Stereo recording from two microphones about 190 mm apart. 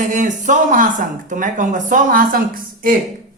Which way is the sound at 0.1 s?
40° right (ahead or behind).